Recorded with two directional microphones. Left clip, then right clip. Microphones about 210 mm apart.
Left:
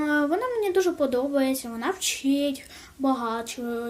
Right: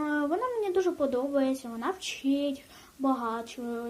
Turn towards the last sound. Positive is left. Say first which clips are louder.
# left 5 dB
turn(degrees=25)  # may be behind; listen again after turning